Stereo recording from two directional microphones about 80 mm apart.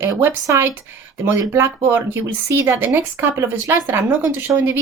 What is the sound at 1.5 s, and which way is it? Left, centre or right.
Speech, right.